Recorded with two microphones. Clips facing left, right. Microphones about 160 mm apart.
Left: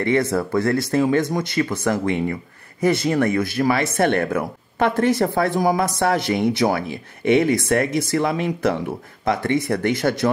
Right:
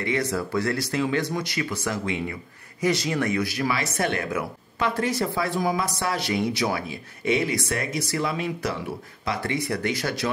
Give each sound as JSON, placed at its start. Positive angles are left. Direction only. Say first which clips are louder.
{"t": 0.0, "sound": "speech", "louder": "left 6 dB", "side_deg": 55}